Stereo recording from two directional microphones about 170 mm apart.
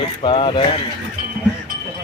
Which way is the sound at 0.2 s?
30° left (ahead or behind).